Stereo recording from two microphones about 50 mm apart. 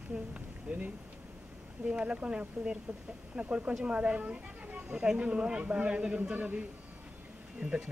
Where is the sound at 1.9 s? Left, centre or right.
Right.